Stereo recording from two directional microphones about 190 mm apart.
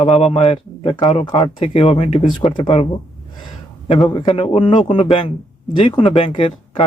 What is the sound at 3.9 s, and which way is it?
A man's voice, 25° left (ahead or behind).